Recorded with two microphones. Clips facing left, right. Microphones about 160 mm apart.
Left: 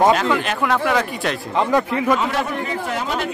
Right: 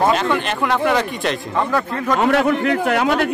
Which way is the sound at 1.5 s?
15° left (ahead or behind).